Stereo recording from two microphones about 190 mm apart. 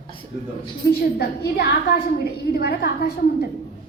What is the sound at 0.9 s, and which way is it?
A woman's voice, 55° left (ahead or behind).